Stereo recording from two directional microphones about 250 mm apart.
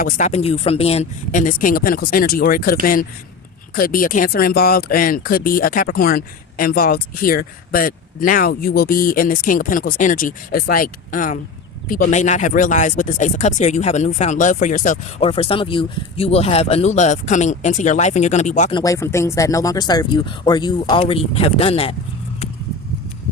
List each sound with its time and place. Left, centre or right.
0.0 s speech: left
18.8 s speech: centre